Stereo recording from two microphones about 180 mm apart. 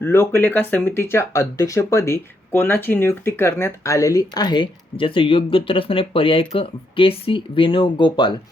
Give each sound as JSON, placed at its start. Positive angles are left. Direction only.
{"t": 0.0, "sound": "speech", "side_deg": 10}